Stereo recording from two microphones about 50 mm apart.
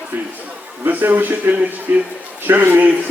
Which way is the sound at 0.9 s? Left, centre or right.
Right.